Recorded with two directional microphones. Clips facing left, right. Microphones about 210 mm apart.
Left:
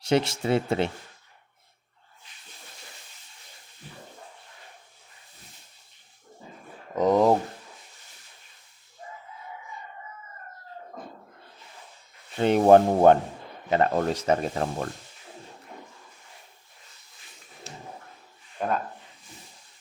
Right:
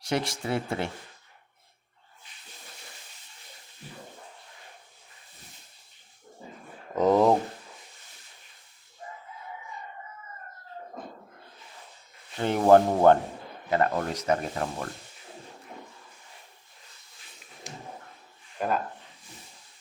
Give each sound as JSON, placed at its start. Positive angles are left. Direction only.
{"t": 0.0, "sound": "speech", "side_deg": 25}
{"t": 6.9, "sound": "speech", "side_deg": 0}
{"t": 12.4, "sound": "speech", "side_deg": 20}
{"t": 17.7, "sound": "a sound", "side_deg": -15}
{"t": 18.6, "sound": "speech", "side_deg": -5}